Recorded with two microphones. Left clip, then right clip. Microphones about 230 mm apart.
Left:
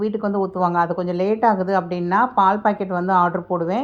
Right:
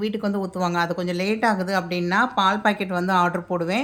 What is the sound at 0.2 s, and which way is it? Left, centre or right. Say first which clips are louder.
Speech: left 5 dB; right.